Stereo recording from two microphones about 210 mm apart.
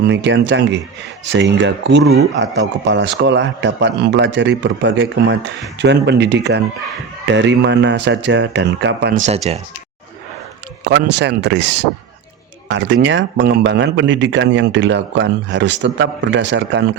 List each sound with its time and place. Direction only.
0.1 s speech: 60° right (ahead or behind)
9.2 s speech: 30° right (ahead or behind)
10.8 s speech: 55° right (ahead or behind)